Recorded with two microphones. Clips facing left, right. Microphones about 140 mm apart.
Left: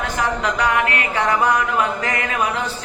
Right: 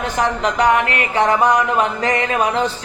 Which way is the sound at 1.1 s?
25° right (ahead or behind).